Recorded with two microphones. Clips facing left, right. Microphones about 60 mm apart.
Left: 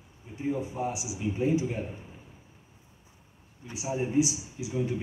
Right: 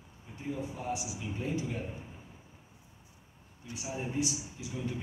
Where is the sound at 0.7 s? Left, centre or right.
Centre.